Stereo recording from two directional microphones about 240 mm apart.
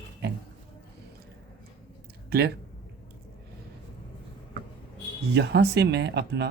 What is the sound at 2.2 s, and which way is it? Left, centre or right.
Speech, right.